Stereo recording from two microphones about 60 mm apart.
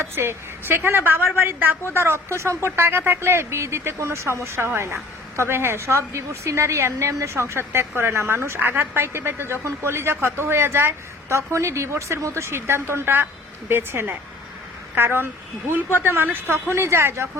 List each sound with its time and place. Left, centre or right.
0.0 s a woman's voice: right
16.5 s speech: right